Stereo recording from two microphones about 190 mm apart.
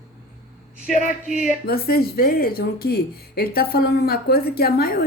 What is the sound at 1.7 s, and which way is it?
Speech, 50° left (ahead or behind).